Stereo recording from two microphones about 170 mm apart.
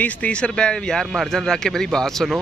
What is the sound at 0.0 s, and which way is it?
A man's voice, 5° left (ahead or behind).